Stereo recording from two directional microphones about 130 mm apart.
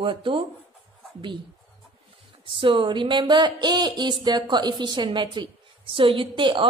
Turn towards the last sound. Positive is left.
turn(degrees=-40)  # may be behind; listen again after turning